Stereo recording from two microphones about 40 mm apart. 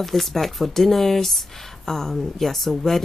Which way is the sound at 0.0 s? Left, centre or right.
Centre.